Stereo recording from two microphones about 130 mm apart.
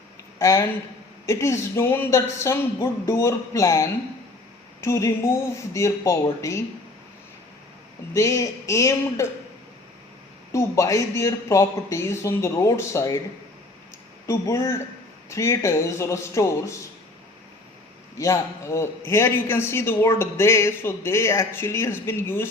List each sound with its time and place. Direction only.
0.3 s a man's voice: 20° left (ahead or behind)
8.1 s a man's voice: 25° left (ahead or behind)
10.5 s a man's voice: 25° left (ahead or behind)
14.3 s a man's voice: 20° left (ahead or behind)
18.2 s a man's voice: 20° left (ahead or behind)